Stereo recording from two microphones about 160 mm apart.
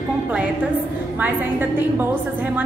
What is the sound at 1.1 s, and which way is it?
A woman's voice, 10° right (ahead or behind).